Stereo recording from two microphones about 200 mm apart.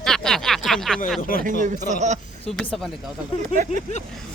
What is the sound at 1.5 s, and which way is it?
Speech, 35° right (ahead or behind).